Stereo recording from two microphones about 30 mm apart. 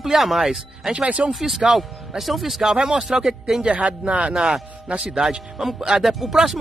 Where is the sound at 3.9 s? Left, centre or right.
Right.